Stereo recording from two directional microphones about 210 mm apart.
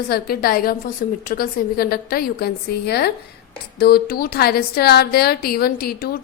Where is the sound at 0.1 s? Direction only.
45° left (ahead or behind).